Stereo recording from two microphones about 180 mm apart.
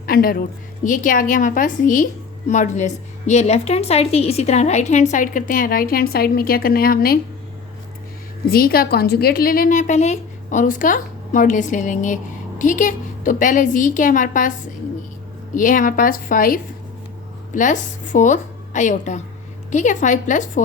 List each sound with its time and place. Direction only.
0.0 s a woman's voice: 55° left (ahead or behind)
8.4 s a woman's voice: 55° left (ahead or behind)
15.5 s a woman's voice: 45° left (ahead or behind)